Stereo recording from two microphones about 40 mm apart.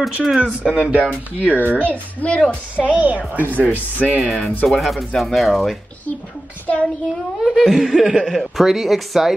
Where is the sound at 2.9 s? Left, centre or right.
Right.